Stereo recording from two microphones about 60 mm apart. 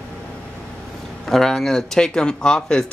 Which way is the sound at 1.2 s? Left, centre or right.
Centre.